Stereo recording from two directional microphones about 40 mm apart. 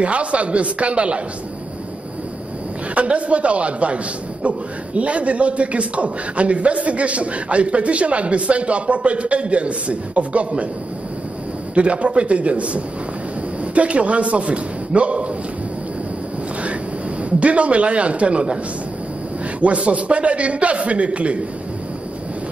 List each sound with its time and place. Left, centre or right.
0.0 s a man's voice: right
2.9 s a man's voice: right
11.7 s a man's voice: right
17.2 s a man's voice: right
19.6 s a man's voice: right